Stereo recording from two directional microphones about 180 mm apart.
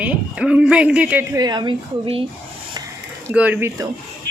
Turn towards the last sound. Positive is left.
turn(degrees=-10)  # may be behind; listen again after turning